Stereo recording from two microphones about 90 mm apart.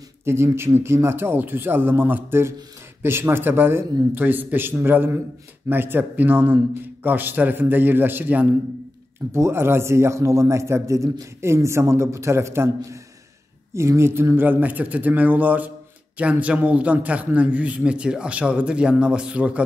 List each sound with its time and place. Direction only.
0.2 s a man's voice: 30° right (ahead or behind)